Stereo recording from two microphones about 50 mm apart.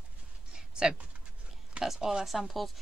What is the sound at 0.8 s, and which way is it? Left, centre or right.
Speech, centre.